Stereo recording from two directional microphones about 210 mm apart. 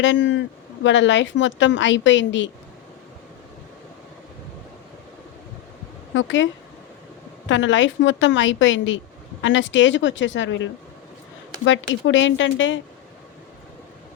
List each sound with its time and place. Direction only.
0.0 s a woman's voice: 60° left (ahead or behind)
6.1 s a woman's voice: 60° left (ahead or behind)